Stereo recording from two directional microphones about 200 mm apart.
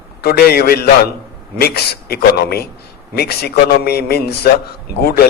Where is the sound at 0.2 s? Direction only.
50° left (ahead or behind).